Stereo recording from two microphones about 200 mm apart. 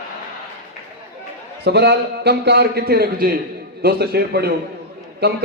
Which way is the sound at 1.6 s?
55° right (ahead or behind).